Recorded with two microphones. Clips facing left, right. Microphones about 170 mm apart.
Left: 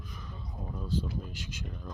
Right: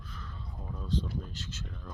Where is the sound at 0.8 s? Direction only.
10° left (ahead or behind).